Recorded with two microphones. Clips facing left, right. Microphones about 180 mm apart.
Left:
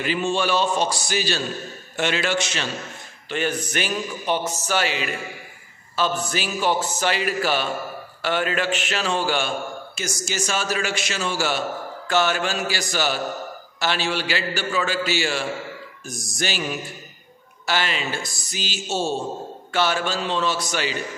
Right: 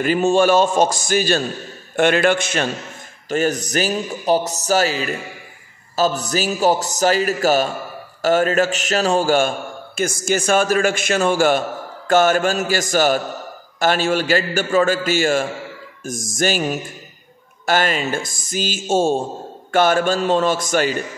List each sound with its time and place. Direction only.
0.0 s a man's voice: 45° right (ahead or behind)
3.3 s a man's voice: 40° right (ahead or behind)